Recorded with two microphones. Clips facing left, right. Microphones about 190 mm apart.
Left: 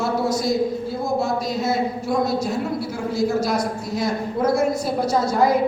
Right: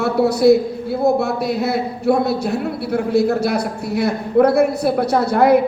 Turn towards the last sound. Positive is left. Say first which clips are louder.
# right 5 dB
turn(degrees=-65)  # may be behind; listen again after turning